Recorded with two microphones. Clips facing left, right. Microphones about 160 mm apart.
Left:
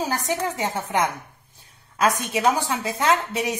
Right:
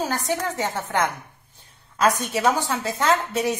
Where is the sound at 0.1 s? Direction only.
10° left (ahead or behind).